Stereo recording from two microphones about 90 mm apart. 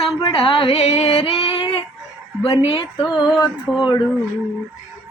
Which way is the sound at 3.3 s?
5° right (ahead or behind).